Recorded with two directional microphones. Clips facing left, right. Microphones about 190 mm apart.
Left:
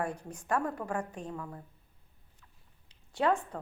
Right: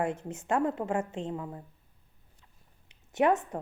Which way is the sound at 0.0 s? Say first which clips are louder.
Right 4 dB; 25° right (ahead or behind).